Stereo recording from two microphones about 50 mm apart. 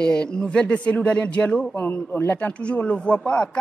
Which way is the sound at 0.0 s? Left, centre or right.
Centre.